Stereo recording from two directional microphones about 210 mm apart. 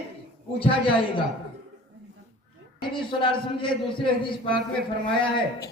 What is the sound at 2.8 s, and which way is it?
Speech, 25° left (ahead or behind).